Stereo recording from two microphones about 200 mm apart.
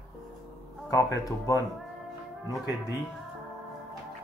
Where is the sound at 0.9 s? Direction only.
15° left (ahead or behind).